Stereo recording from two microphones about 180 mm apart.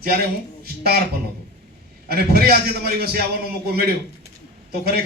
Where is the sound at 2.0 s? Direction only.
60° right (ahead or behind).